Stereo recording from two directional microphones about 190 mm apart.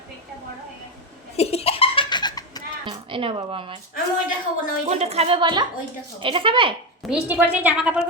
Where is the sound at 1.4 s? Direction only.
30° left (ahead or behind).